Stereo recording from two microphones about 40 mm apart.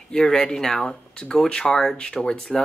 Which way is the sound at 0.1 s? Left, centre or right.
Centre.